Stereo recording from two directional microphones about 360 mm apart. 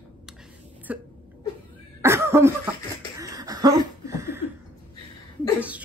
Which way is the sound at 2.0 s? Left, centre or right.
Centre.